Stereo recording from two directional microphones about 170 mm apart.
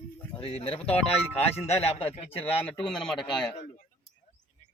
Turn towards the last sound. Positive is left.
turn(degrees=0)  # may be behind; listen again after turning